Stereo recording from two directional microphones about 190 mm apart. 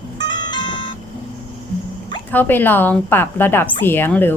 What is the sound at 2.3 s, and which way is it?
A woman's voice, 10° left (ahead or behind).